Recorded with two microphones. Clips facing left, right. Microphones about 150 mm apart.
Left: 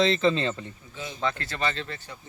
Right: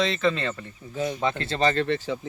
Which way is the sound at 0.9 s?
50° right (ahead or behind).